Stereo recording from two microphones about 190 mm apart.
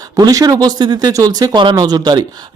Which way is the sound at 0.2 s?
20° right (ahead or behind).